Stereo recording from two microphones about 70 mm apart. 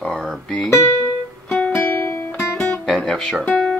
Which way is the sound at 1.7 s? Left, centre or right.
Left.